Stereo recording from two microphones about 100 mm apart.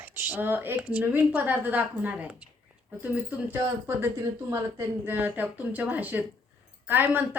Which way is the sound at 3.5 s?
20° right (ahead or behind).